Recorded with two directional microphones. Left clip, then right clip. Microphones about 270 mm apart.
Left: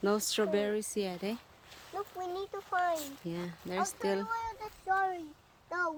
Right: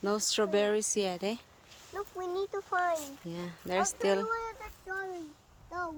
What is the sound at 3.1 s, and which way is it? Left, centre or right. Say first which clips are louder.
Speech: left 1 dB; centre.